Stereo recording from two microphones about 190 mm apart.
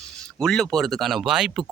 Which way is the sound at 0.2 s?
5° left (ahead or behind).